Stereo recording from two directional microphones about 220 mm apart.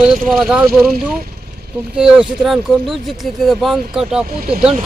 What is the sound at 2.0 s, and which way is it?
Speech, 5° right (ahead or behind).